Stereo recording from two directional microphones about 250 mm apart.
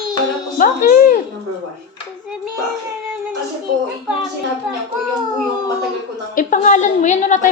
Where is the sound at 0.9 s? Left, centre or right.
Left.